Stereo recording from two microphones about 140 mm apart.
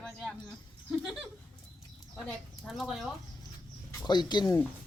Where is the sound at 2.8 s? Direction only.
Centre (ahead or behind).